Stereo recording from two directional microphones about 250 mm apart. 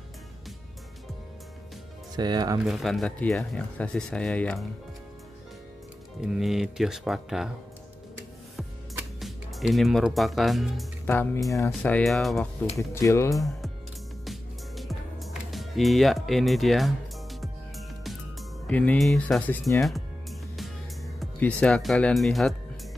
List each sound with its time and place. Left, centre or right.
2.1 s speech: centre
2.6 s speech: centre
6.2 s speech: centre
8.5 s speech: centre
12.7 s speech: centre
14.2 s music: centre
18.7 s speech: centre